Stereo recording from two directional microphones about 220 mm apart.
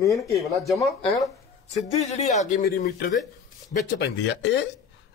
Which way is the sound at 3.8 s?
50° left (ahead or behind).